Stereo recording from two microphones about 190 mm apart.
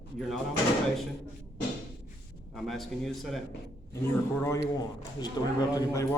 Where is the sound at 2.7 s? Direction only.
Centre (ahead or behind).